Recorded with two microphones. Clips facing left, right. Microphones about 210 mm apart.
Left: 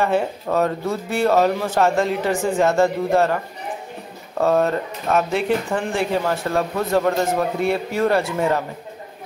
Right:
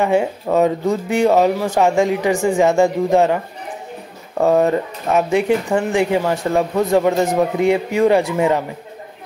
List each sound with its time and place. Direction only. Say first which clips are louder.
0.0 s speech: right 3 dB; 15° right (ahead or behind)
4.4 s speech: right 4 dB; 15° right (ahead or behind)